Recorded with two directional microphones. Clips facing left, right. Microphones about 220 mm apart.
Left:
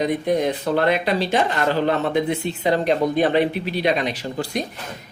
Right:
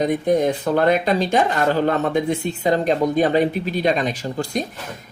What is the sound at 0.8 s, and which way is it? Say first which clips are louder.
Speech: right 3 dB; 45° right (ahead or behind).